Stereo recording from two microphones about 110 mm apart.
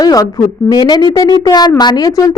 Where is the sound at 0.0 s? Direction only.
35° left (ahead or behind).